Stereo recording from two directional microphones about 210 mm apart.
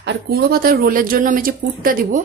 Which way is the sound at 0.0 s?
55° right (ahead or behind).